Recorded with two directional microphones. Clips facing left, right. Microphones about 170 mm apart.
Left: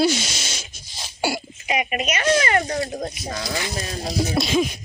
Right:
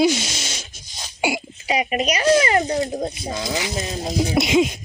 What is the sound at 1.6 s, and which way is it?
Speech, 35° right (ahead or behind).